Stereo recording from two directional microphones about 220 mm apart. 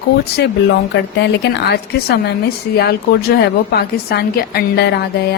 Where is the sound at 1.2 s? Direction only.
50° left (ahead or behind).